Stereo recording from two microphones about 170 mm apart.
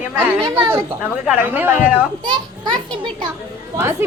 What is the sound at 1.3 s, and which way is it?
Speech, 10° right (ahead or behind).